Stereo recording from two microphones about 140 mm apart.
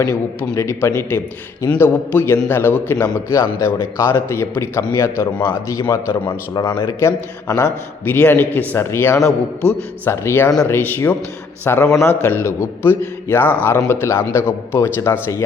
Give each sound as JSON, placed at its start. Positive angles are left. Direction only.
{"t": 0.5, "sound": "a man's voice", "side_deg": 20}